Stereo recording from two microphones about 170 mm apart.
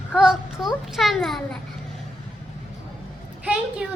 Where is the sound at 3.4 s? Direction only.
5° right (ahead or behind).